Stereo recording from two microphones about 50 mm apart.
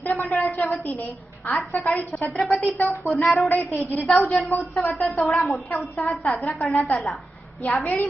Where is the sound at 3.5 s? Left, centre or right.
Left.